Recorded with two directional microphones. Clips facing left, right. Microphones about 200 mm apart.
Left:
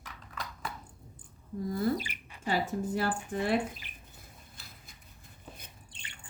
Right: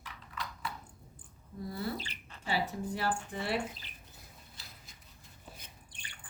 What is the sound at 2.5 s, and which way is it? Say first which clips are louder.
Speech: left 4 dB; 45° left (ahead or behind).